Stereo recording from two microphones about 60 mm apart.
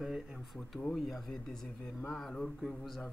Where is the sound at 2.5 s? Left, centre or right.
Centre.